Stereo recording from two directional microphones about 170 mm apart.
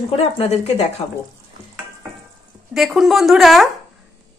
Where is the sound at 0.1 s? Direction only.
35° left (ahead or behind).